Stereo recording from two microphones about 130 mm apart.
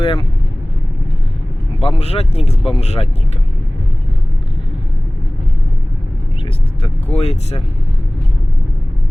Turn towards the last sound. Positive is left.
turn(degrees=55)  # may be behind; listen again after turning